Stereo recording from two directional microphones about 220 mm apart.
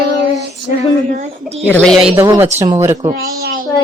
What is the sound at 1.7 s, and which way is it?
Child singing, 5° left (ahead or behind).